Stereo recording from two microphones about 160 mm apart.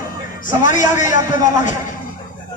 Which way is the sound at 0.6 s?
50° left (ahead or behind).